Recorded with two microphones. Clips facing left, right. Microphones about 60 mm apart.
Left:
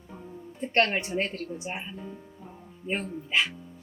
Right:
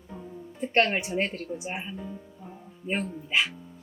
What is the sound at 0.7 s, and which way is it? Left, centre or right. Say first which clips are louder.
Speech: right 1 dB; centre.